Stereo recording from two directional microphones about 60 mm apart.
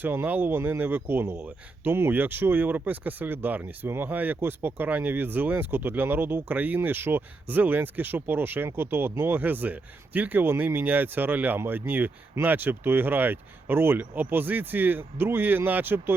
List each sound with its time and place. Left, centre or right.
0.0 s a man's voice: right